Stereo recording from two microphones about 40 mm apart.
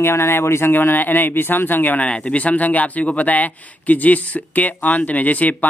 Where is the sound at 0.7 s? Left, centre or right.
Left.